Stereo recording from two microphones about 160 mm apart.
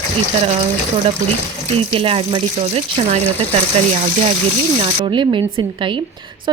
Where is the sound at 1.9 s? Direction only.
35° right (ahead or behind).